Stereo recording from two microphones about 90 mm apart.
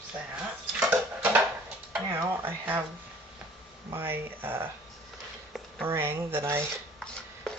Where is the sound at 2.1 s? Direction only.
35° right (ahead or behind).